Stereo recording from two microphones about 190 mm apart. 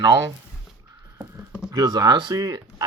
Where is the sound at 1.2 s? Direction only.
10° right (ahead or behind).